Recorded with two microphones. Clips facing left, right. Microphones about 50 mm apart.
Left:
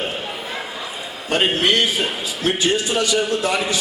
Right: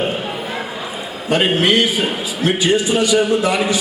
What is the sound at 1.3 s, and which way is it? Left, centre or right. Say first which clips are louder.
A man's voice: right 3 dB; centre.